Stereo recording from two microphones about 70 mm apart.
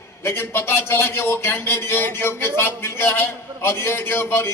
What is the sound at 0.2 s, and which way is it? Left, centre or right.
A man's voice, left.